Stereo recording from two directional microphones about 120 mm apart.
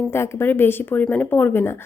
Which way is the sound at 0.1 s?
20° left (ahead or behind).